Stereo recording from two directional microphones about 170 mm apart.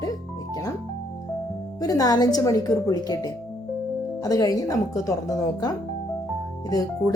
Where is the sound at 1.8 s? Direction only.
20° left (ahead or behind).